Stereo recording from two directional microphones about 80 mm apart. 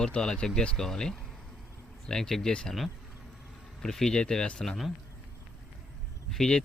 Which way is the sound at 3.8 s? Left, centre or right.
Centre.